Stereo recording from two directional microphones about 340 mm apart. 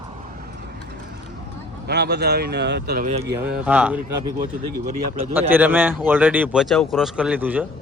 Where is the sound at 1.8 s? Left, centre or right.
Right.